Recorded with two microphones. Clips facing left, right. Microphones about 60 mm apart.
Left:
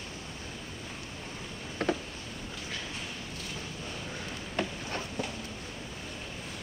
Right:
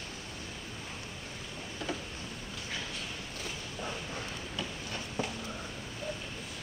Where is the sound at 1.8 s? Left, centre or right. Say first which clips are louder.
Left 7 dB; left.